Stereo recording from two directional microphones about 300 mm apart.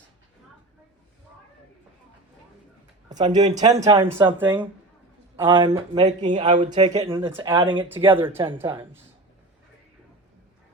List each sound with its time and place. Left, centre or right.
3.1 s speech: right
3.3 s speech: centre